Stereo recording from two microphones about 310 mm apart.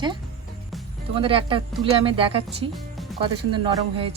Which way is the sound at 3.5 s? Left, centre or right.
Centre.